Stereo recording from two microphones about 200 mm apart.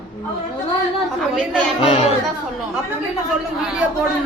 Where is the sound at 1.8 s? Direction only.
30° left (ahead or behind).